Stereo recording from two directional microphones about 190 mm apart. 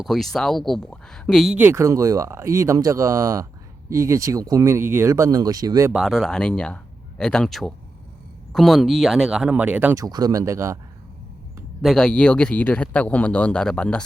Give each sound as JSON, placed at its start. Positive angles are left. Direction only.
{"t": 0.0, "sound": "a man's voice", "side_deg": 0}
{"t": 1.5, "sound": "speech", "side_deg": -10}
{"t": 5.9, "sound": "a man's voice", "side_deg": 0}
{"t": 11.8, "sound": "a man's voice", "side_deg": 0}